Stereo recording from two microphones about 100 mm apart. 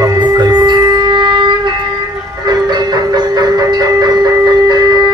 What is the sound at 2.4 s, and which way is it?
Music, 40° right (ahead or behind).